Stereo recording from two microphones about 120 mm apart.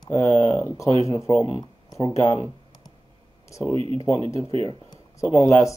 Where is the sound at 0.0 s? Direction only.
25° left (ahead or behind).